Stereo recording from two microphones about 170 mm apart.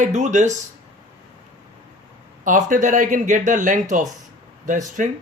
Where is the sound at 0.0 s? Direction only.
45° right (ahead or behind).